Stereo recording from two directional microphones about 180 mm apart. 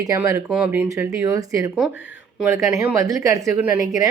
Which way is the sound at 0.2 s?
10° right (ahead or behind).